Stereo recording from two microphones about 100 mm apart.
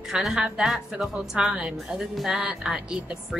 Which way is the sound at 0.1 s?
5° right (ahead or behind).